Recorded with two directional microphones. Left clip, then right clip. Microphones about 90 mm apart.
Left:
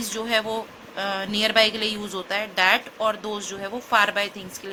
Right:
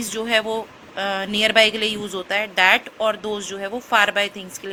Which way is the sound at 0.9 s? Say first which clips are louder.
Right 3 dB; 30° right (ahead or behind).